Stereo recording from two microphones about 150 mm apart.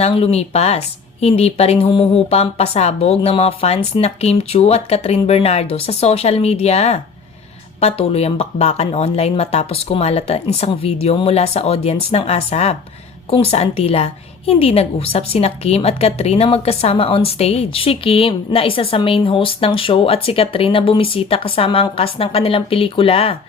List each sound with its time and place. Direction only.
0.0 s a woman's voice: 45° left (ahead or behind)